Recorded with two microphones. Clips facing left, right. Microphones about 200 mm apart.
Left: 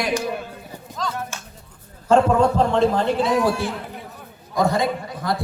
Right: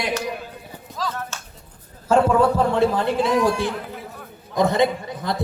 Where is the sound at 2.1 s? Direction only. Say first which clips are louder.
Left 1 dB; 5° right (ahead or behind).